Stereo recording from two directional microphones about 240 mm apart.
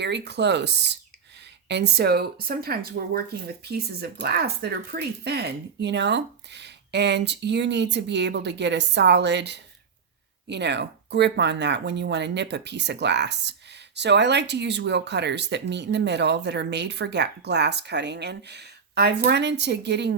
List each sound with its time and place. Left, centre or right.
0.0 s speech: right